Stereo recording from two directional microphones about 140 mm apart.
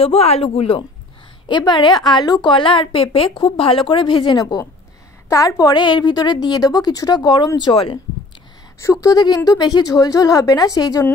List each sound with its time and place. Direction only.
0.0 s speech: 45° left (ahead or behind)
1.5 s a woman's voice: 35° left (ahead or behind)
8.7 s a woman's voice: 20° left (ahead or behind)